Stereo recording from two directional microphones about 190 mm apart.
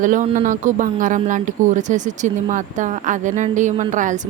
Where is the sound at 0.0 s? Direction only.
45° right (ahead or behind).